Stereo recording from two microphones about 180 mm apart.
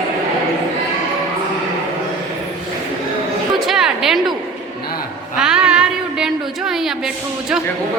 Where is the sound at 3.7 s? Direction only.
5° right (ahead or behind).